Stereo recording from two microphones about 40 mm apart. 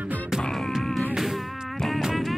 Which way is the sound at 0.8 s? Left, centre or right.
Centre.